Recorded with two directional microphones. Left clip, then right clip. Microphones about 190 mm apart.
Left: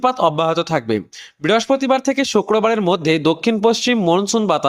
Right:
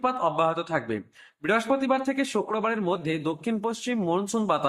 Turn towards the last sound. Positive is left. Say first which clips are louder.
# left 9 dB
turn(degrees=40)  # may be behind; listen again after turning